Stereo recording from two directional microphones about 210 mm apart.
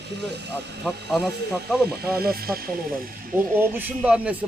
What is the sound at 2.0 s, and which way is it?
Speech, 45° right (ahead or behind).